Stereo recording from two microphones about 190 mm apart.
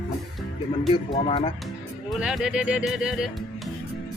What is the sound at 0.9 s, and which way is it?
Speech, 25° left (ahead or behind).